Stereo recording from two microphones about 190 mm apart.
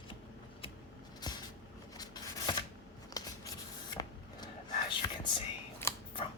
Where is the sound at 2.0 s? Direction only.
20° left (ahead or behind).